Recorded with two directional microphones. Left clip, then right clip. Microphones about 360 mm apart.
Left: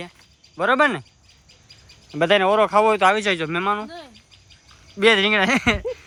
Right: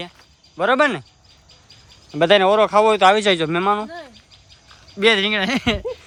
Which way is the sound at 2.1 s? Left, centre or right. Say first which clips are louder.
Right 3 dB; centre.